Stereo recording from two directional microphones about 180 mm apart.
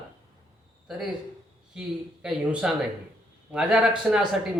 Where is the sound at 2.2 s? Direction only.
5° right (ahead or behind).